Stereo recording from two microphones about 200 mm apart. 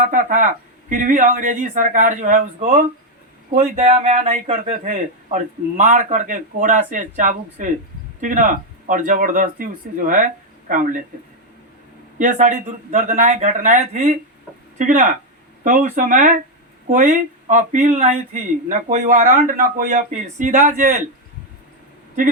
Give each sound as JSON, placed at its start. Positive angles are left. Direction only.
{"t": 0.0, "sound": "speech", "side_deg": -40}
{"t": 3.5, "sound": "speech", "side_deg": -30}
{"t": 12.2, "sound": "speech", "side_deg": -40}
{"t": 14.8, "sound": "speech", "side_deg": -40}